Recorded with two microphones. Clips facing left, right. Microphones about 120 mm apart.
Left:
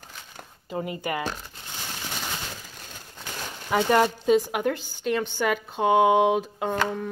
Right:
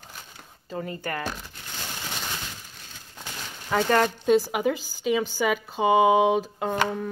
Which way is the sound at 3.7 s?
10° left (ahead or behind).